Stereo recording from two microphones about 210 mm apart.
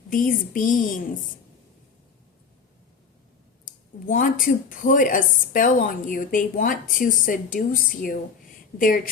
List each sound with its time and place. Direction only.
0.1 s a woman's voice: 40° left (ahead or behind)
4.0 s a woman's voice: 40° left (ahead or behind)